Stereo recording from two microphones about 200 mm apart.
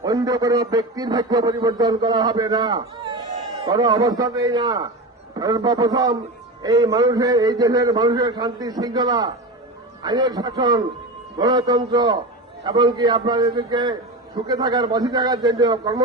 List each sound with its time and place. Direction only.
0.0 s a man's voice: 20° right (ahead or behind)